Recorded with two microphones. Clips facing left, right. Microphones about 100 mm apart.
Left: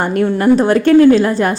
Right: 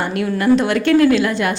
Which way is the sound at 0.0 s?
40° left (ahead or behind).